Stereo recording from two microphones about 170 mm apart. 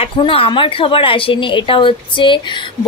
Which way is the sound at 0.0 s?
30° left (ahead or behind).